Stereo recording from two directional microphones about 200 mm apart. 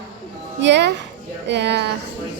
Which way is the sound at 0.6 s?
60° right (ahead or behind).